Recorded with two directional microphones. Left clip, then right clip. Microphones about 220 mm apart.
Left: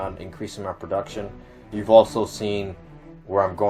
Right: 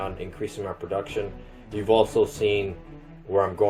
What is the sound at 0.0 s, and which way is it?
Speech, 35° left (ahead or behind).